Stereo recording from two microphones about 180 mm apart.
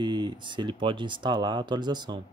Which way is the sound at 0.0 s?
25° right (ahead or behind).